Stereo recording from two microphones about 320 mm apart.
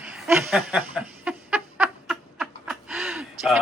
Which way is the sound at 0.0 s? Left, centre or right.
Centre.